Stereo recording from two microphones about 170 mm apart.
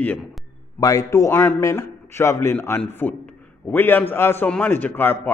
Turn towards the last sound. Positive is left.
turn(degrees=10)  # may be behind; listen again after turning